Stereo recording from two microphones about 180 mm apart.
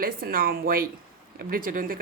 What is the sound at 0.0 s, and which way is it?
Speech, 55° right (ahead or behind).